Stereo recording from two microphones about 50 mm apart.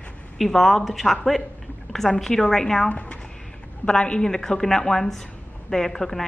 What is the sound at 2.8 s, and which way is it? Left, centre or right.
A woman's voice, left.